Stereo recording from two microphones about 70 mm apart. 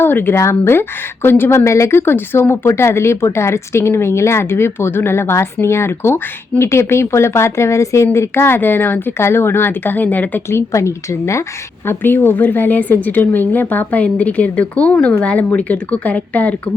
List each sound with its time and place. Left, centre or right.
0.0 s speech: left
1.5 s speech: left
10.5 s a woman's voice: left
11.9 s speech: left